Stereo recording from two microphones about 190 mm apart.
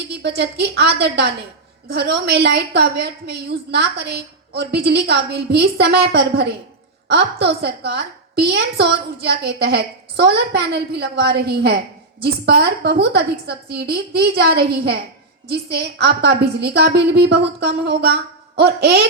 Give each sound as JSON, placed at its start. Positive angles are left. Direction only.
{"t": 0.1, "sound": "a woman's voice", "side_deg": -60}